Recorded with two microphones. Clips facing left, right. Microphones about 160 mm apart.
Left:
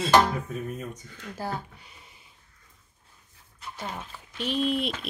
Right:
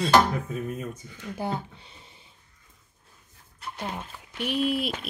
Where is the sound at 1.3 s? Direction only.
25° right (ahead or behind).